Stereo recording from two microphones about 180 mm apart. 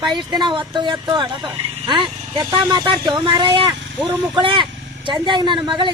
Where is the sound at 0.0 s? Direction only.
25° right (ahead or behind).